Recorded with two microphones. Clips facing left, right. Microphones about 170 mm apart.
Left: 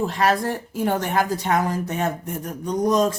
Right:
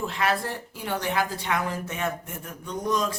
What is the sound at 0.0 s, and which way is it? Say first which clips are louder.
A woman's voice: left 6 dB; 40° left (ahead or behind).